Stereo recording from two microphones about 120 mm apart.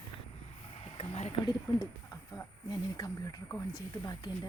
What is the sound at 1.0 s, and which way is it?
Speech, 55° left (ahead or behind).